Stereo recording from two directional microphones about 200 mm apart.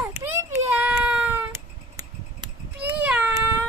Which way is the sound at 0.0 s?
10° right (ahead or behind).